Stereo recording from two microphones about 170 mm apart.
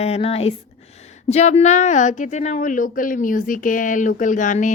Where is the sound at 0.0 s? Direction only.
35° left (ahead or behind).